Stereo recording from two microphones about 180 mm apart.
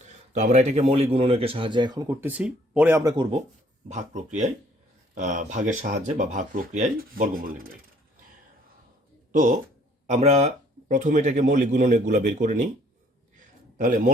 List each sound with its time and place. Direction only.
0.3 s speech: 40° right (ahead or behind); by 3.2 s 20° right (ahead or behind)
3.8 s speech: 40° right (ahead or behind)
9.3 s speech: 45° right (ahead or behind)
13.3 s a sound: 50° right (ahead or behind)